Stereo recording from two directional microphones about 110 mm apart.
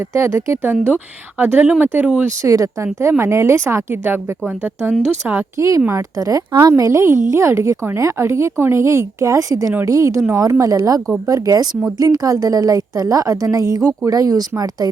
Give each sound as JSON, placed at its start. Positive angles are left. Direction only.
{"t": 0.1, "sound": "a woman's voice", "side_deg": -25}
{"t": 2.4, "sound": "a woman's voice", "side_deg": -30}